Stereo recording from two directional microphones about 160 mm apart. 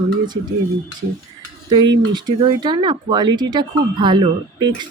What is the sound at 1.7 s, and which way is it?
A woman's voice, 25° right (ahead or behind).